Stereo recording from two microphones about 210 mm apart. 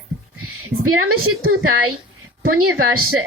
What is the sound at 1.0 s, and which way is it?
Speech, 90° right.